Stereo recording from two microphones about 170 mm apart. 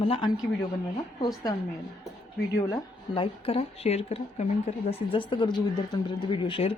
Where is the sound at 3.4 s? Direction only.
35° left (ahead or behind).